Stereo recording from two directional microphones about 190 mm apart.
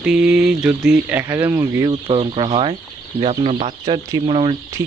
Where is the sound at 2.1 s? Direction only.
25° right (ahead or behind).